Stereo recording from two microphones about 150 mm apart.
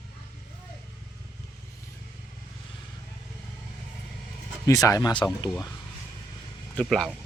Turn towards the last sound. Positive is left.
turn(degrees=5)  # may be behind; listen again after turning